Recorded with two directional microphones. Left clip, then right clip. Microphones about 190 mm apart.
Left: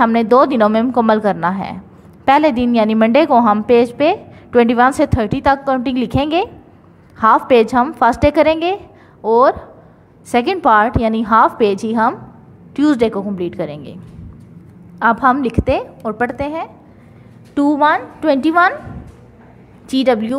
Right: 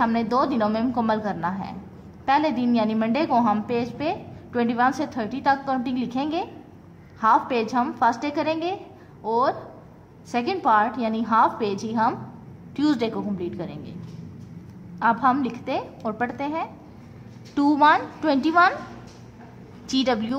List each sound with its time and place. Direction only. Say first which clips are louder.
0.0 s a woman's voice: left 11 dB; 35° left (ahead or behind)
15.0 s a woman's voice: left 7 dB; 30° left (ahead or behind)
17.6 s a woman's voice: left 4 dB; 15° left (ahead or behind)
19.9 s a woman's voice: left 9 dB; 20° left (ahead or behind)